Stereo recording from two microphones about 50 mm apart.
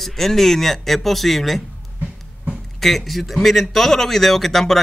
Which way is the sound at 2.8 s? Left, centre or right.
Centre.